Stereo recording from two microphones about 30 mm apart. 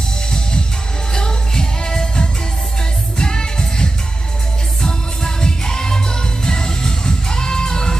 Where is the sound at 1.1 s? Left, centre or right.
Left.